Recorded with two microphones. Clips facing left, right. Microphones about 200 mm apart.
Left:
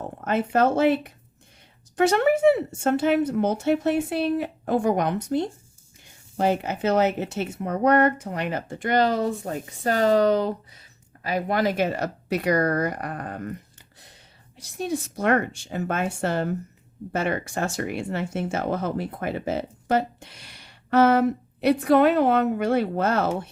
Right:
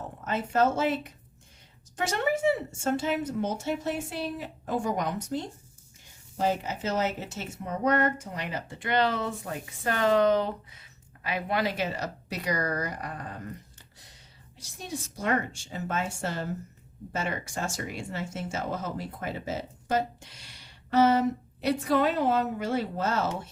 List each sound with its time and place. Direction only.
0.3 s a woman's voice: 60° left (ahead or behind)
2.0 s a woman's voice: 65° left (ahead or behind)
14.6 s a woman's voice: 60° left (ahead or behind)